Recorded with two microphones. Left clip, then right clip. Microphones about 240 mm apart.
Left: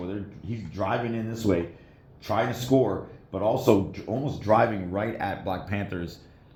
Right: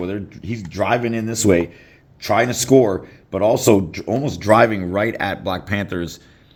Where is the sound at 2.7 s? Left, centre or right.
Right.